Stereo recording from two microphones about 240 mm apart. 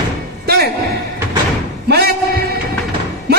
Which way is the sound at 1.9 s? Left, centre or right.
Right.